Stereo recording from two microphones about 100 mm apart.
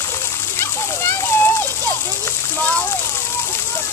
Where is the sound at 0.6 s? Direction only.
20° left (ahead or behind).